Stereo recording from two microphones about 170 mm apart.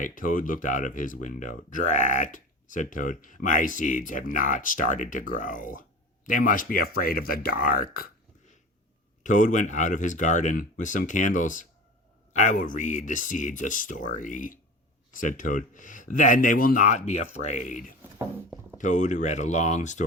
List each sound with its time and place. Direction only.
0.0 s speech: 55° left (ahead or behind)
9.2 s speech: 50° left (ahead or behind)
18.8 s speech: 45° left (ahead or behind)